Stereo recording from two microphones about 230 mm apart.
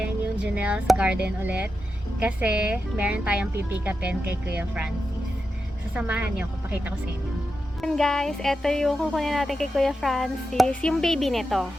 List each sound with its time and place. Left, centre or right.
0.0 s speech: centre
2.1 s music: centre
5.9 s music: centre